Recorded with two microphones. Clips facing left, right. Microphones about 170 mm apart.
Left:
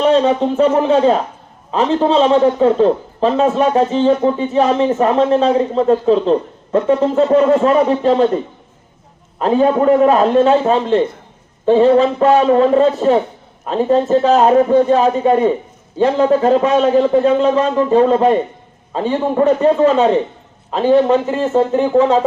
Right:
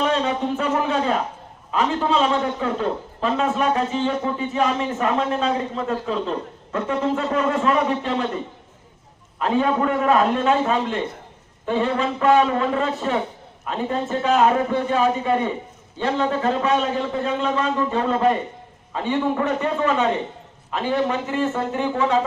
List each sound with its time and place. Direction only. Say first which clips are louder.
0.0 s a man's voice: left 9 dB; 30° left (ahead or behind)
9.4 s a man's voice: left 7 dB; 35° left (ahead or behind)